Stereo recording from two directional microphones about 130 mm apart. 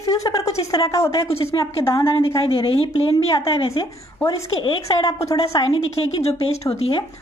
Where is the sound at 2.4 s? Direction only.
45° left (ahead or behind).